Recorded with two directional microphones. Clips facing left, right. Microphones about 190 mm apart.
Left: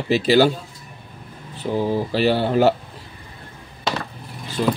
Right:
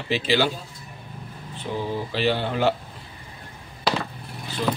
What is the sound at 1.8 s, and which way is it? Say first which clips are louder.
Speech: left 4 dB; 40° left (ahead or behind).